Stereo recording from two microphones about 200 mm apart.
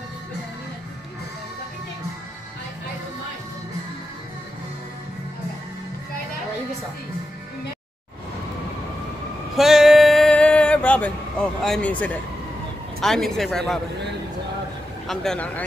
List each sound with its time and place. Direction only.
9.6 s a sound: centre (ahead or behind)
13.0 s speech: centre (ahead or behind)
15.0 s speech: 5° left (ahead or behind)